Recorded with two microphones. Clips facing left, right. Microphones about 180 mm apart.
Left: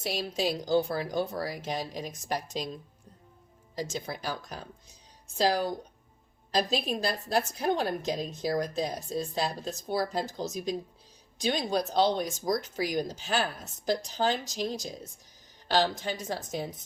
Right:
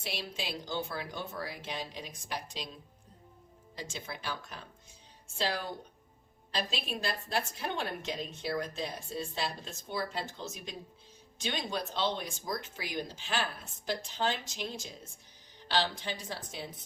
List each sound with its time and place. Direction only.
0.0 s a woman's voice: 40° left (ahead or behind)
3.8 s a woman's voice: 40° left (ahead or behind)